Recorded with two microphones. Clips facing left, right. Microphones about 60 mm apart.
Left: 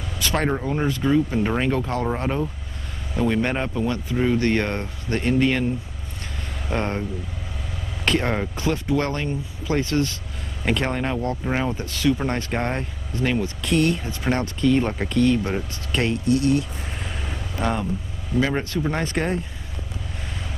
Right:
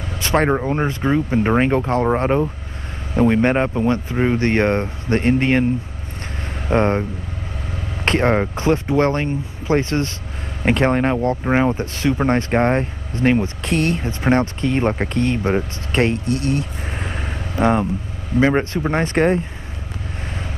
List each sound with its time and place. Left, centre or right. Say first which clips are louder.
0.2 s speech: right 6 dB; right
6.7 s speech: right 8 dB; right